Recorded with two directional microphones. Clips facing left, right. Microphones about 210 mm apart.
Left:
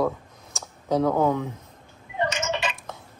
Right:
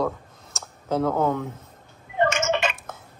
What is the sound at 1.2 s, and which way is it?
Speech, 15° left (ahead or behind).